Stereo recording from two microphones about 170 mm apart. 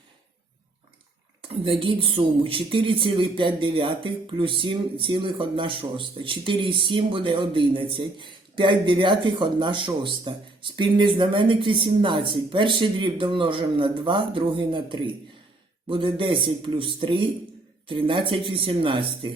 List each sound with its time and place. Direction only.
1.4 s speech: 30° right (ahead or behind)